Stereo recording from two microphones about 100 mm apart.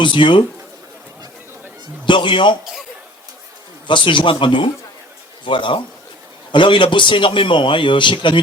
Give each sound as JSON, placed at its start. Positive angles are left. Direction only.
{"t": 0.0, "sound": "a man's voice", "side_deg": 55}
{"t": 2.0, "sound": "a man's voice", "side_deg": 55}
{"t": 3.8, "sound": "a man's voice", "side_deg": 55}